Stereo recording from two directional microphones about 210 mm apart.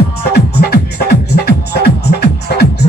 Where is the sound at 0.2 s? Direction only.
50° left (ahead or behind).